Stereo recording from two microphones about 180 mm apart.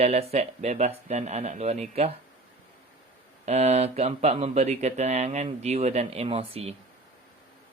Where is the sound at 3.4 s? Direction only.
35° right (ahead or behind).